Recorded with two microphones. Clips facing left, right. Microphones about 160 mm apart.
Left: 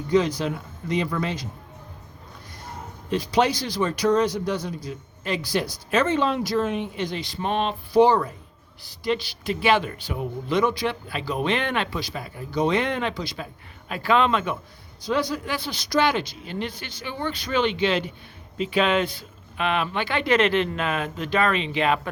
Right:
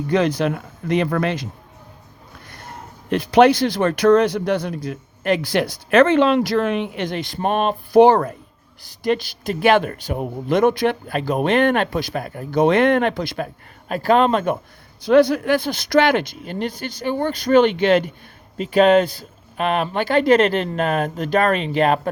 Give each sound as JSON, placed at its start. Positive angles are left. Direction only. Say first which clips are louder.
{"t": 0.1, "sound": "speech", "louder": "right 3 dB", "side_deg": -60}
{"t": 3.1, "sound": "speech", "louder": "right 8 dB", "side_deg": -60}
{"t": 15.0, "sound": "speech", "louder": "right 11 dB", "side_deg": -60}